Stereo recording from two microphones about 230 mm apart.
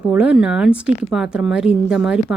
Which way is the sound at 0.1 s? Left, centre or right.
Centre.